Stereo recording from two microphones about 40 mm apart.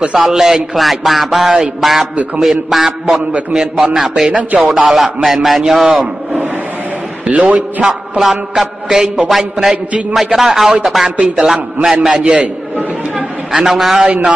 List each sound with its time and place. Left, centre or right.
0.1 s a man's voice: centre
4.4 s a man's voice: right
4.9 s a man's voice: centre
7.2 s a man's voice: right
8.2 s a man's voice: centre
13.5 s a man's voice: centre
14.0 s a sound: right